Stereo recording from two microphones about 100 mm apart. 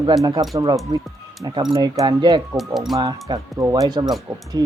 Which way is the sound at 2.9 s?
40° right (ahead or behind).